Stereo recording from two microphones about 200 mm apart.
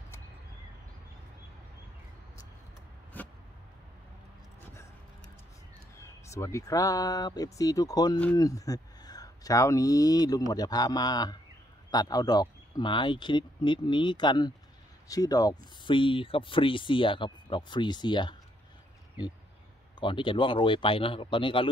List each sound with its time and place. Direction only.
3.1 s a sound: 10° left (ahead or behind)
6.2 s speech: 15° left (ahead or behind)
20.0 s speech: 25° left (ahead or behind)